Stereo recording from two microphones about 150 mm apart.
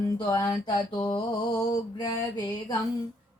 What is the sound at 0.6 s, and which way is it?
Mantra, 30° left (ahead or behind).